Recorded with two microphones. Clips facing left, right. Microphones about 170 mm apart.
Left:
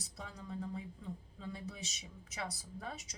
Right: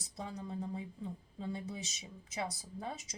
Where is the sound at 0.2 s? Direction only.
25° right (ahead or behind).